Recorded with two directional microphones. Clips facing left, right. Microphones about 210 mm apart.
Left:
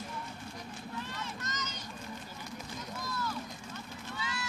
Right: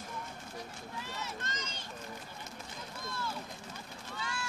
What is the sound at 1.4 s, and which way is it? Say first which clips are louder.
Run: left 1 dB; 30° right (ahead or behind).